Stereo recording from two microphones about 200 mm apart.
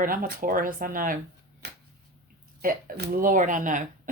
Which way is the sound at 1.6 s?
55° right (ahead or behind).